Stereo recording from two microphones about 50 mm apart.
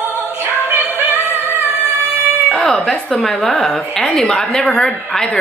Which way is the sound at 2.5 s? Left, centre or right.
Centre.